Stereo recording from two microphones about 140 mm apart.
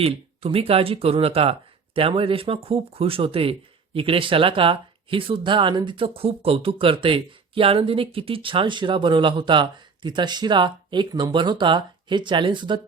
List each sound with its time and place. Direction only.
0.0 s speech: 45° right (ahead or behind)